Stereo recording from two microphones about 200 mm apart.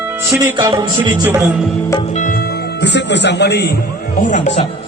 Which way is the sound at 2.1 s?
45° left (ahead or behind).